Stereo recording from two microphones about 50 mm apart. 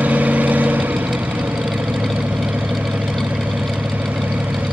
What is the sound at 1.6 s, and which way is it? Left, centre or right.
Engine, centre.